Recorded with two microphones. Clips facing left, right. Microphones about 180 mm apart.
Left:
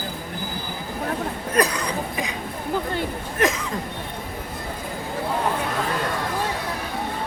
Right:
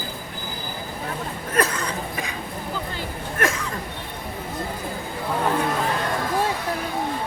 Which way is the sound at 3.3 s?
20° left (ahead or behind).